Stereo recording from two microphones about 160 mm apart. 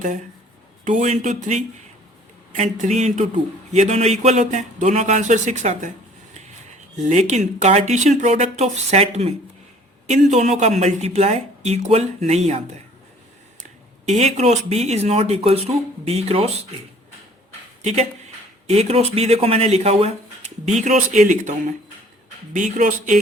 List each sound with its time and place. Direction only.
0.9 s speech: 50° right (ahead or behind)
6.9 s speech: 45° right (ahead or behind)
18.7 s speech: 40° right (ahead or behind)
22.5 s speech: 55° right (ahead or behind)